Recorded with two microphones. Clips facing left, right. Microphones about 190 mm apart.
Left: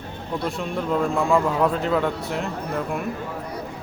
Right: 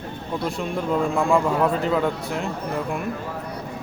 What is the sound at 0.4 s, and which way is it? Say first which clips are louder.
A man's voice: right 1 dB; centre (ahead or behind).